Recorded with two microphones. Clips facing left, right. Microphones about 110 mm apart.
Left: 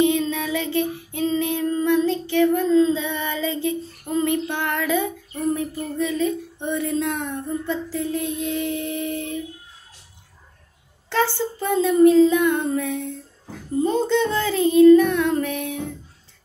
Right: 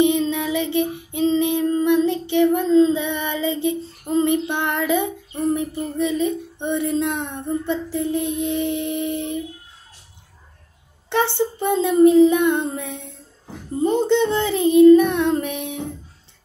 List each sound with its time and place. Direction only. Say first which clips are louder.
0.0 s child singing: right 2 dB; 20° right (ahead or behind)
11.1 s speech: right 2 dB; 20° right (ahead or behind)